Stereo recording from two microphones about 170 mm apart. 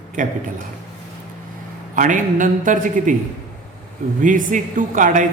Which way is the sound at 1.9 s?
50° right (ahead or behind).